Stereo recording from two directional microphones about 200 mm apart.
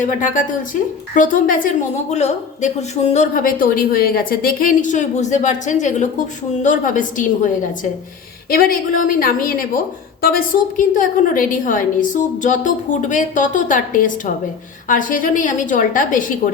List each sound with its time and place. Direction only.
0.0 s a woman's voice: 40° left (ahead or behind)
8.4 s a woman's voice: 45° left (ahead or behind)